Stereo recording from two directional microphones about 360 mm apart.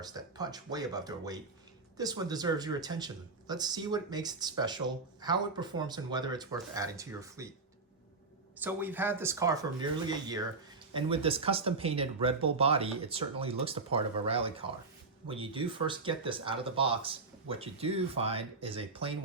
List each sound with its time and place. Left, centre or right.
0.0 s speech: centre
8.6 s speech: centre